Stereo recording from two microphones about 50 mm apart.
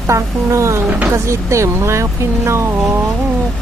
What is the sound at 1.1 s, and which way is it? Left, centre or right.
Speech, right.